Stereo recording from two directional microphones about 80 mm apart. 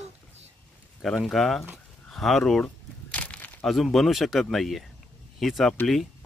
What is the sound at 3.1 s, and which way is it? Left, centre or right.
Crumpling, centre.